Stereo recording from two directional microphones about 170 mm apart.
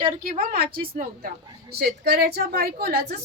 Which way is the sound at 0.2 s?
60° right (ahead or behind).